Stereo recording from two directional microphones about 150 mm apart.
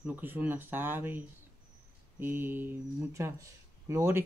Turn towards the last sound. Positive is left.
turn(degrees=-15)  # may be behind; listen again after turning